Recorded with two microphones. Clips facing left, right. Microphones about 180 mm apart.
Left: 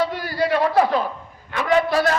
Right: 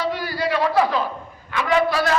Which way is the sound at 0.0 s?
55° left (ahead or behind).